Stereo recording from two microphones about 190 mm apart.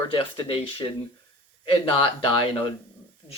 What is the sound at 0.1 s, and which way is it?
Speech, 25° left (ahead or behind).